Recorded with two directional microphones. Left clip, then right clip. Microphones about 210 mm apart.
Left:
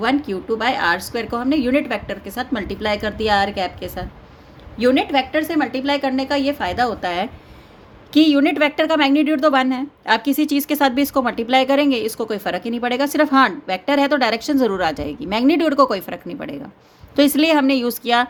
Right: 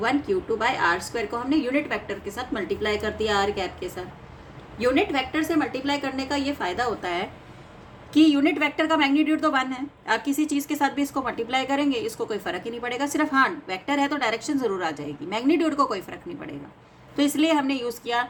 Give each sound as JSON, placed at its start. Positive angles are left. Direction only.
{"t": 0.0, "sound": "a woman's voice", "side_deg": 55}